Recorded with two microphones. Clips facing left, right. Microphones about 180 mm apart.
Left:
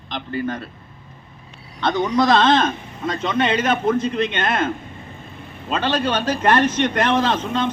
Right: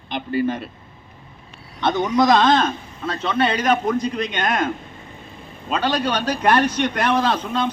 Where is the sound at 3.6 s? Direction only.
10° right (ahead or behind).